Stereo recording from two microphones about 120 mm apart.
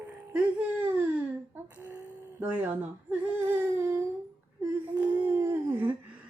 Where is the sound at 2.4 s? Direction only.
15° right (ahead or behind).